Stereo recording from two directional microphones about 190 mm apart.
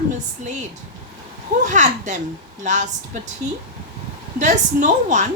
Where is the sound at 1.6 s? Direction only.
40° right (ahead or behind).